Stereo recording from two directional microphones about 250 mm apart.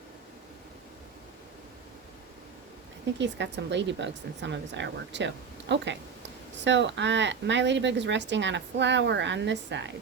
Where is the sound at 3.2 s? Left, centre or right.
Right.